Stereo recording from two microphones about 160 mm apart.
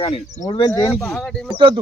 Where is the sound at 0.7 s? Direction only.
15° left (ahead or behind).